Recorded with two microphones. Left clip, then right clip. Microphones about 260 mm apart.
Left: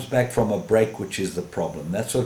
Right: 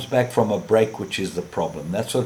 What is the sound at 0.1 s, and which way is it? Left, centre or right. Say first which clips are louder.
Speech: right 2 dB; centre.